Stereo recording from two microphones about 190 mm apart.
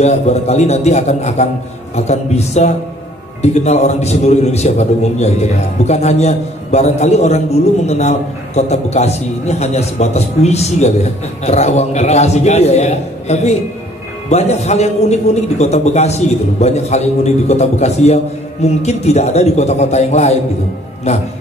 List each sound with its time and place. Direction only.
0.0 s a man's voice: 35° left (ahead or behind)